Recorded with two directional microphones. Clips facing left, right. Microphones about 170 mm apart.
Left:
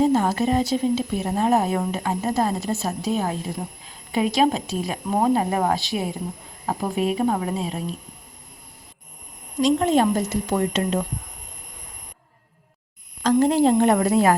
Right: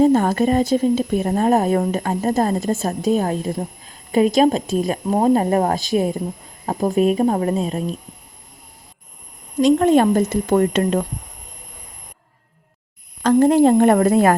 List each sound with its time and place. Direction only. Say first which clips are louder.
0.0 s speech: right 4 dB; 50° right (ahead or behind)
9.6 s speech: right 5 dB; 55° right (ahead or behind)
13.2 s speech: right 4 dB; 50° right (ahead or behind)